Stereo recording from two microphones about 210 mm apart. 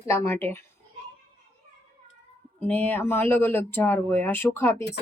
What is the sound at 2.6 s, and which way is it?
Speech, 10° left (ahead or behind).